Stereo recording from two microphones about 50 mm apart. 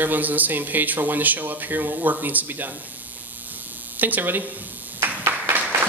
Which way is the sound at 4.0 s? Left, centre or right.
Right.